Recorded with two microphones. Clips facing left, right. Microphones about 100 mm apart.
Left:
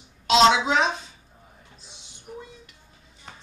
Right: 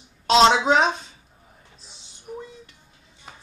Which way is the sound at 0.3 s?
35° right (ahead or behind).